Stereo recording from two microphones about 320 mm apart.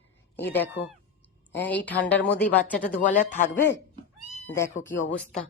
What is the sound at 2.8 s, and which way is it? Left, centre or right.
Speech, left.